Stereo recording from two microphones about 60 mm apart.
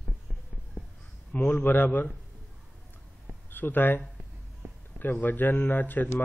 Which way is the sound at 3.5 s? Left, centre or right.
Left.